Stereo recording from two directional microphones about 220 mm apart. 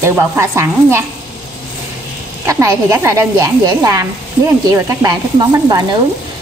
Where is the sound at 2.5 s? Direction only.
15° right (ahead or behind).